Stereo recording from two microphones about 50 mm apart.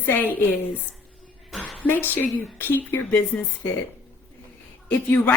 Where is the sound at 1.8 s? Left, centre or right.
Left.